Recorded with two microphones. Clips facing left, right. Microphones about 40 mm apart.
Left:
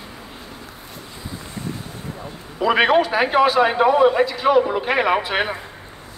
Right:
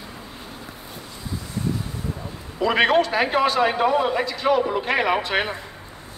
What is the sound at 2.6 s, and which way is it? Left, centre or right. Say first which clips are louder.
A man's voice: left 2 dB; centre.